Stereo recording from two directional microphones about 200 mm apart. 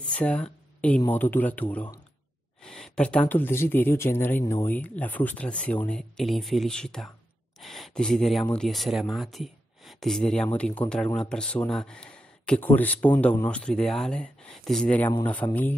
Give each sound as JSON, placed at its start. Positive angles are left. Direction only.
{"t": 0.0, "sound": "speech", "side_deg": 5}